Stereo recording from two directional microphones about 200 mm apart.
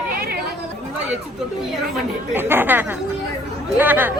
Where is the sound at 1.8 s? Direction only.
5° right (ahead or behind).